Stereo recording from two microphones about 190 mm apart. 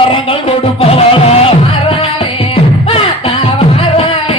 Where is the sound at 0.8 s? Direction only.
30° left (ahead or behind).